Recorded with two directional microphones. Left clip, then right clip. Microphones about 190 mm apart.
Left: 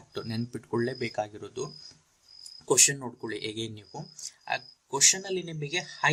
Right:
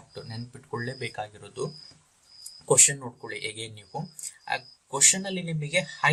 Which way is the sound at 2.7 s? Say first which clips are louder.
Right 2 dB; 30° left (ahead or behind).